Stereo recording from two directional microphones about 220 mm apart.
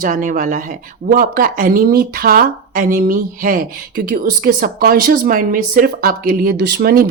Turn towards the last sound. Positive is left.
turn(degrees=-45)  # may be behind; listen again after turning